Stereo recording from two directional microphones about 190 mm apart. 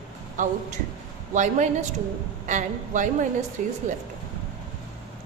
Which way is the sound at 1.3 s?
40° right (ahead or behind).